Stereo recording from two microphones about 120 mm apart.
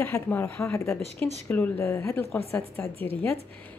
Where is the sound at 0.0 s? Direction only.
20° left (ahead or behind).